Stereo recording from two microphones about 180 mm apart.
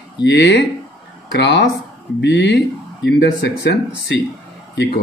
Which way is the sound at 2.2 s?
75° left (ahead or behind).